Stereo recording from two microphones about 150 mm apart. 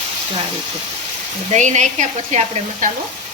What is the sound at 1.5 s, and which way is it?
Frying, 50° right (ahead or behind).